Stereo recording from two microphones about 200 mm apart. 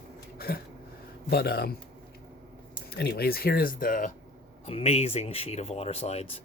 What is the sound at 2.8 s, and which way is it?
Speech, 55° left (ahead or behind).